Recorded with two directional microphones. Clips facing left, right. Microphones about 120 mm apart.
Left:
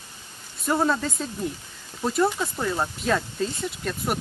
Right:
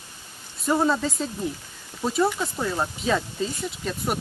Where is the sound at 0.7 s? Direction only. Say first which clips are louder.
Right 1 dB; centre (ahead or behind).